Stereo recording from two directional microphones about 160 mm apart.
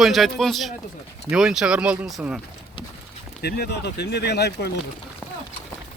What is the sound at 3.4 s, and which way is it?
Speech, 85° left.